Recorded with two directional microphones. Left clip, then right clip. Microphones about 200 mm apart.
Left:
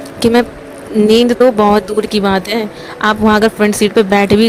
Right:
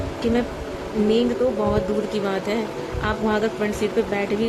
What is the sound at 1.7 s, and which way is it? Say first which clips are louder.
A woman's voice: left 9 dB; 50° left (ahead or behind).